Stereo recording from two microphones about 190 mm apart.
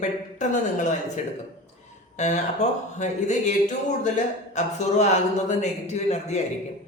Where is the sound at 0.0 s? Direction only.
40° left (ahead or behind).